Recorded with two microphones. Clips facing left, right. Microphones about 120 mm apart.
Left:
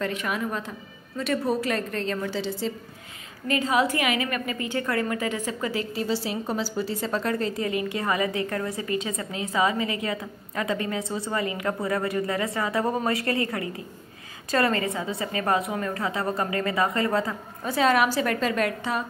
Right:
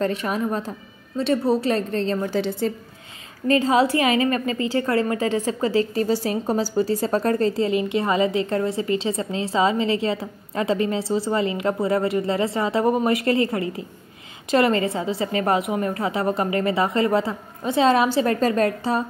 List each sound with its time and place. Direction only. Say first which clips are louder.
0.0 s a woman's voice: right 5 dB; 35° right (ahead or behind)
2.3 s a woman's voice: right 6 dB; 50° right (ahead or behind)
3.4 s a woman's voice: right 5 dB; 35° right (ahead or behind)
7.6 s a woman's voice: right 5 dB; 25° right (ahead or behind)